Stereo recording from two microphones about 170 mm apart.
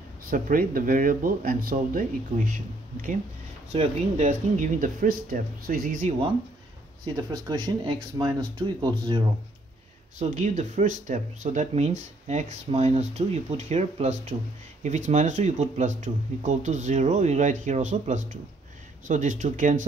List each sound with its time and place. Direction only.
0.3 s speech: 55° right (ahead or behind)
3.7 s speech: 35° right (ahead or behind)
4.6 s speech: 50° right (ahead or behind)
7.2 s speech: 25° right (ahead or behind)
10.1 s speech: 45° right (ahead or behind)